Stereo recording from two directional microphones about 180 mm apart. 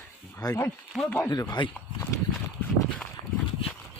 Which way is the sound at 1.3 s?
20° left (ahead or behind).